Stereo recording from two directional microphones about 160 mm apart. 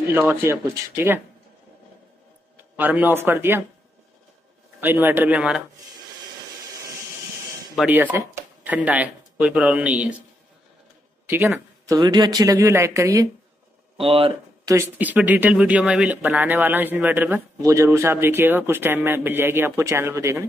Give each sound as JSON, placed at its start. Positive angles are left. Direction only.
{"t": 0.1, "sound": "speech", "side_deg": -15}
{"t": 2.5, "sound": "speech", "side_deg": -10}
{"t": 4.7, "sound": "speech", "side_deg": -15}
{"t": 7.7, "sound": "speech", "side_deg": -10}
{"t": 11.2, "sound": "speech", "side_deg": -15}
{"t": 13.9, "sound": "speech", "side_deg": -35}
{"t": 14.7, "sound": "speech", "side_deg": -15}